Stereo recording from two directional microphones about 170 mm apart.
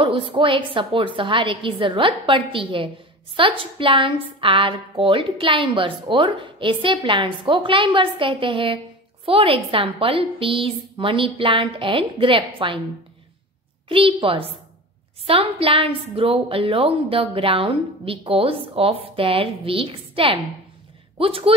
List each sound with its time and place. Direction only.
0.0 s a woman's voice: 30° right (ahead or behind)
13.8 s a woman's voice: 30° right (ahead or behind)